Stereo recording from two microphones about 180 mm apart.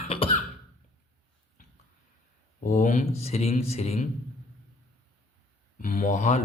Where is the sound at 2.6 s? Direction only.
45° left (ahead or behind).